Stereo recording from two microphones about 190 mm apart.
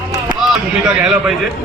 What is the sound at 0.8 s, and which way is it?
Music, 5° right (ahead or behind).